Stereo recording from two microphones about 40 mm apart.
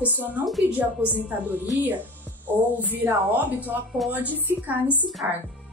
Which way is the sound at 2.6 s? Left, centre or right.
Right.